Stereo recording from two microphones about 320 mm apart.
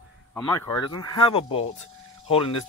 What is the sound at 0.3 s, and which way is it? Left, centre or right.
Speech, centre.